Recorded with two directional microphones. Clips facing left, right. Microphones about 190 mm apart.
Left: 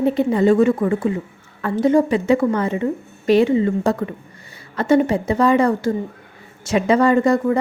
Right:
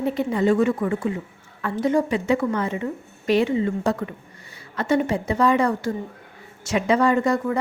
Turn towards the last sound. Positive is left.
turn(degrees=30)  # may be behind; listen again after turning